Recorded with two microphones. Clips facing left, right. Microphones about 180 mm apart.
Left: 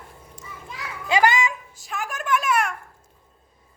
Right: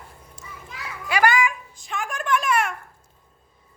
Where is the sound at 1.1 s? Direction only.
20° left (ahead or behind).